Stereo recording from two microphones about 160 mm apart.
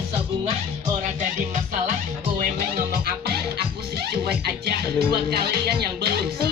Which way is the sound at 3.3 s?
80° right.